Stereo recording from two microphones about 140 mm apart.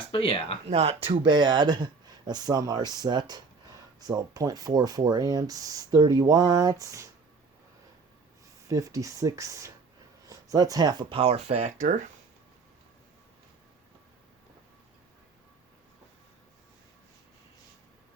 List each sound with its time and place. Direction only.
0.1 s speech: 40° left (ahead or behind)
0.7 s speech: 50° right (ahead or behind)
1.0 s speech: 35° right (ahead or behind)
8.6 s speech: 25° right (ahead or behind); by 12.0 s 65° right (ahead or behind)